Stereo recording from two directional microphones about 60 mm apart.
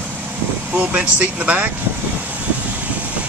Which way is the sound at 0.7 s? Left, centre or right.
Right.